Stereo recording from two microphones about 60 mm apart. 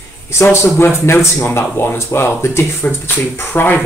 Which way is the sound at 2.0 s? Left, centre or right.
Left.